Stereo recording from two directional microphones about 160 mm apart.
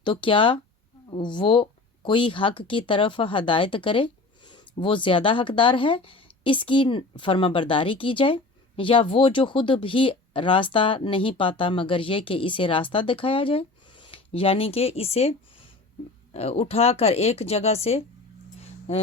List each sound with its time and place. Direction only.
0.0 s speech: 30° left (ahead or behind)